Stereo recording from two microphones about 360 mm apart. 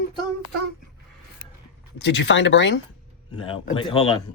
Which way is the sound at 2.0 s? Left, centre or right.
Left.